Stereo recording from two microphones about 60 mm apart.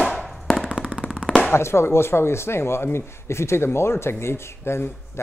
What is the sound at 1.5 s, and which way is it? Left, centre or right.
Speech, left.